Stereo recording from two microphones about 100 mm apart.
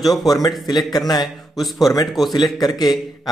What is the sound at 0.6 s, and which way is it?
Speech, 40° left (ahead or behind).